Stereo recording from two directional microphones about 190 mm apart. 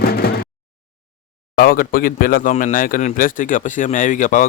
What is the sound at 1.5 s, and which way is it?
A man's voice, 50° left (ahead or behind).